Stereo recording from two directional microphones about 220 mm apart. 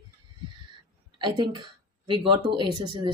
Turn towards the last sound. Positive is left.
turn(degrees=-20)  # may be behind; listen again after turning